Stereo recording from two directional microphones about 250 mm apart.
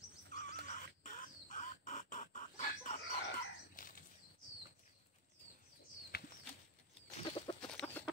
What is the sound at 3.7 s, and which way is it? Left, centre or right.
Bird flight, left.